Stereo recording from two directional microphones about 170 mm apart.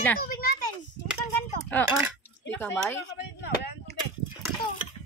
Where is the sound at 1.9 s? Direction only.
10° right (ahead or behind).